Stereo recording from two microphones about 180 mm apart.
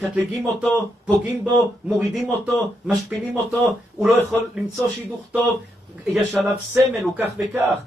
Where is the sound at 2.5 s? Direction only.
10° right (ahead or behind).